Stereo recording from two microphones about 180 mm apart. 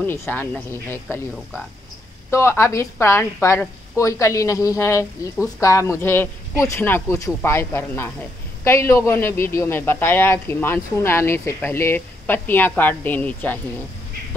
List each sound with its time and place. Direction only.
0.0 s a woman's voice: 10° left (ahead or behind)
2.3 s a woman's voice: 15° left (ahead or behind)